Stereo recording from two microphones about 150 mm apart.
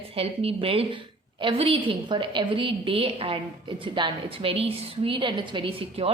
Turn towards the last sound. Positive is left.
turn(degrees=-40)  # may be behind; listen again after turning